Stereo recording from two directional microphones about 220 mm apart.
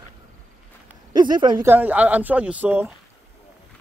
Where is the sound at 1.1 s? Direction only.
20° right (ahead or behind).